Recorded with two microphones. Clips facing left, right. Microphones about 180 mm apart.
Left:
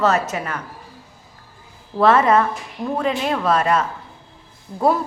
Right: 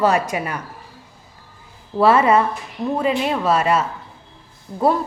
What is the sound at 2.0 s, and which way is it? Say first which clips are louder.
A woman's voice: even; 10° right (ahead or behind).